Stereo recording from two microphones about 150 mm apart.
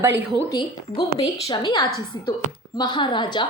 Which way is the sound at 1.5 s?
30° left (ahead or behind).